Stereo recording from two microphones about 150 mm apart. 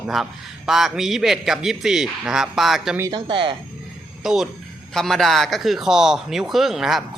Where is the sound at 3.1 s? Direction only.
35° right (ahead or behind).